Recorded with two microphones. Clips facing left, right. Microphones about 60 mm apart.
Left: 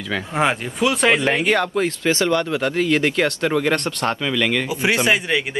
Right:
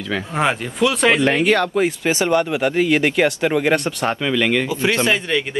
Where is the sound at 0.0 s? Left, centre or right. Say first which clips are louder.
Even; centre.